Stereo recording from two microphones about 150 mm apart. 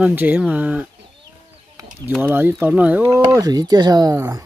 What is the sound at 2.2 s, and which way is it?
Speech, 15° right (ahead or behind).